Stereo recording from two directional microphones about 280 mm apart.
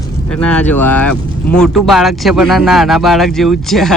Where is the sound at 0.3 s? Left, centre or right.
Centre.